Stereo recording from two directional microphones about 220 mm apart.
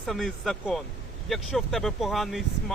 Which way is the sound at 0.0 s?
Centre (ahead or behind).